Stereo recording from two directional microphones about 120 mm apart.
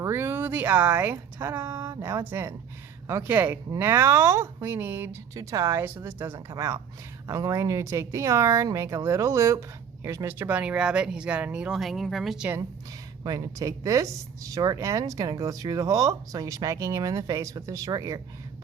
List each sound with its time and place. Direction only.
0.0 s speech: 20° right (ahead or behind); by 12.5 s centre (ahead or behind)
13.2 s speech: 35° right (ahead or behind)